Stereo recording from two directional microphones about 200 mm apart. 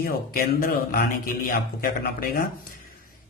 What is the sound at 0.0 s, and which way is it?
Speech, 50° left (ahead or behind).